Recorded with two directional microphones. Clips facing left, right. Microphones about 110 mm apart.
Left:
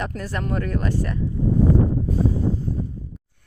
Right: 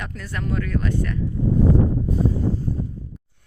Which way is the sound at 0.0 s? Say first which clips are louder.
Left 3 dB; 40° left (ahead or behind).